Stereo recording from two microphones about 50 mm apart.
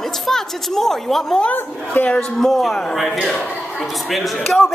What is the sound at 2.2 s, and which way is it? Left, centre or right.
A woman's voice, centre.